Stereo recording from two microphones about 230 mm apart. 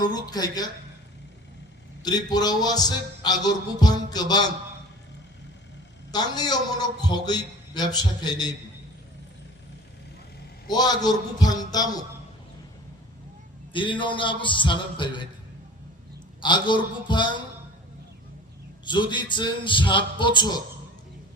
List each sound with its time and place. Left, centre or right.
0.0 s a man's voice: centre
2.0 s a man's voice: centre
6.1 s a man's voice: centre
10.7 s a man's voice: centre
13.7 s speech: left
16.4 s speech: centre
18.9 s speech: centre